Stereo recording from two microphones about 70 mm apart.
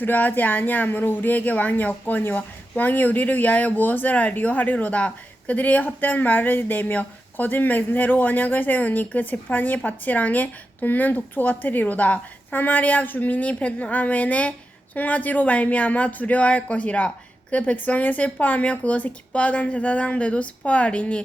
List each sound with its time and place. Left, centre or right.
0.0 s speech: left